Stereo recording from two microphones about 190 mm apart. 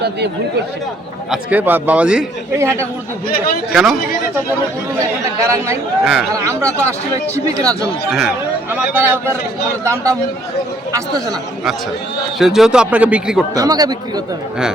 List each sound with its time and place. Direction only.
0.0 s speech: 60° right (ahead or behind)
1.3 s a man's voice: 10° right (ahead or behind)
3.7 s a man's voice: 5° right (ahead or behind)
5.4 s a man's voice: 15° right (ahead or behind)
12.4 s a man's voice: centre (ahead or behind)
13.6 s speech: 20° right (ahead or behind)